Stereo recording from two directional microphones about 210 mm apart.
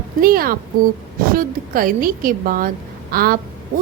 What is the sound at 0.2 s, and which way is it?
A woman's voice, 45° right (ahead or behind).